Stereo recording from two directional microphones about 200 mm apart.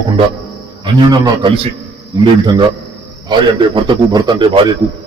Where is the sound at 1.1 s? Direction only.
20° right (ahead or behind).